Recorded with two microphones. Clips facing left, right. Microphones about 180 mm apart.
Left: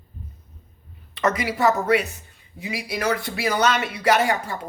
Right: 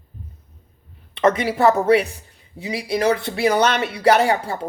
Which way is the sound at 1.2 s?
25° right (ahead or behind).